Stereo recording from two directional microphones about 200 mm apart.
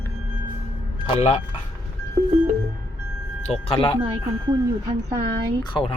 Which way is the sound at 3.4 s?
30° left (ahead or behind).